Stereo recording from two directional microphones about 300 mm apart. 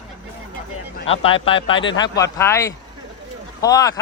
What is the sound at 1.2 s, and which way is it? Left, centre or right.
Speech, centre.